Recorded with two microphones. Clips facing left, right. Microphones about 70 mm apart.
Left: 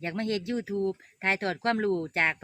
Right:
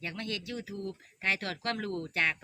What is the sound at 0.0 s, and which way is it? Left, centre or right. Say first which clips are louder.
Speech: left 8 dB; left.